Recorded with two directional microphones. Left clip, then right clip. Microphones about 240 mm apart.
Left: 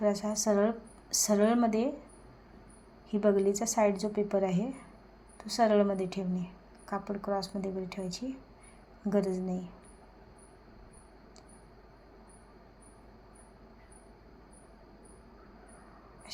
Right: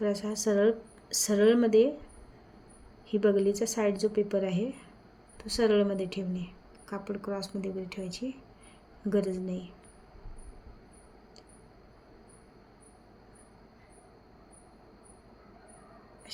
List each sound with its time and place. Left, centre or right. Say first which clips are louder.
0.0 s a woman's voice: left 1 dB; centre
3.1 s a woman's voice: right 1 dB; centre